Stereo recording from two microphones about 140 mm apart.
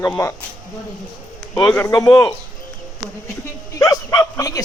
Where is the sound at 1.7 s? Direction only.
20° left (ahead or behind).